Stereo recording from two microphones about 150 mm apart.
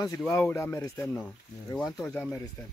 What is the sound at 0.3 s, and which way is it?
Speech, 15° left (ahead or behind).